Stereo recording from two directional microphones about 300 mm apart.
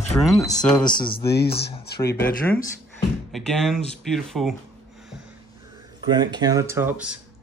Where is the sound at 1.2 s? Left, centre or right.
Left.